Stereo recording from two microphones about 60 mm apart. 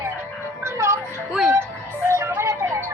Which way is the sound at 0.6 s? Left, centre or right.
Right.